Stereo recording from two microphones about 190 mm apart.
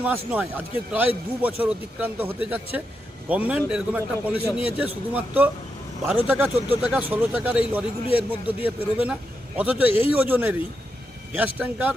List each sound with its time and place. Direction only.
0.0 s speech: 5° right (ahead or behind)